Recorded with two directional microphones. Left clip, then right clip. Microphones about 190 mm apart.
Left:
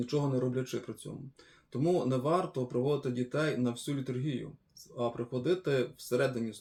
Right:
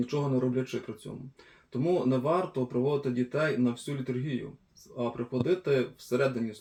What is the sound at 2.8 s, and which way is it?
Speech, 15° left (ahead or behind).